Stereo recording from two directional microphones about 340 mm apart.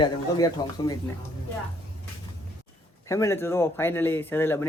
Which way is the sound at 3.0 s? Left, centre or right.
Centre.